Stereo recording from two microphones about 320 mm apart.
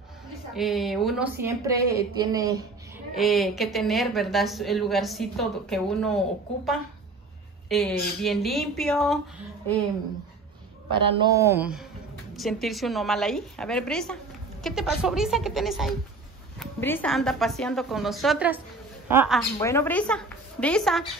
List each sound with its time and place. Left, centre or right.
0.6 s speech: centre
3.2 s speech: centre
10.9 s speech: centre
19.6 s speech: centre